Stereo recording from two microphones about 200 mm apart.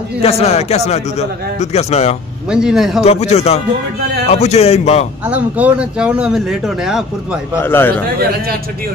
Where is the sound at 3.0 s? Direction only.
30° left (ahead or behind).